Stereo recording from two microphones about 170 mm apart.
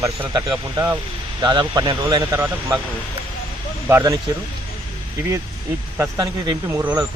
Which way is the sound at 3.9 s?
20° right (ahead or behind).